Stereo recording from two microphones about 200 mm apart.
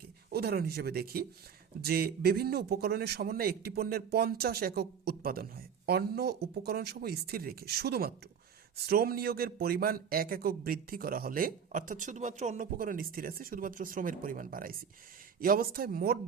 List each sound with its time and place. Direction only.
0.3 s a man's voice: 50° right (ahead or behind)